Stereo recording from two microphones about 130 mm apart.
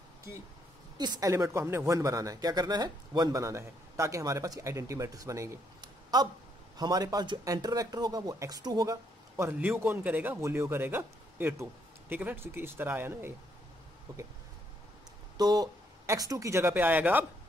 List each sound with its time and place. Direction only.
0.9 s speech: 30° right (ahead or behind)
9.4 s speech: 15° right (ahead or behind)
14.1 s speech: 30° right (ahead or behind)
15.3 s speech: 30° right (ahead or behind); by 17.3 s 15° right (ahead or behind)